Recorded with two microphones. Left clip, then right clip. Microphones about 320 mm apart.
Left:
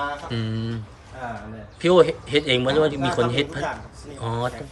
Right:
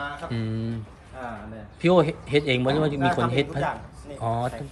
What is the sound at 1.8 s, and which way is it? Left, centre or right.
A man's voice, centre.